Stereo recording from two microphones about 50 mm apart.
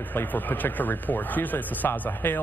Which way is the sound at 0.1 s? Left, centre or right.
Left.